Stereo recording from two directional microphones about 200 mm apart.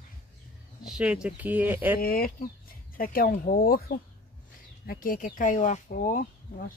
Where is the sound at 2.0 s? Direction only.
45° left (ahead or behind).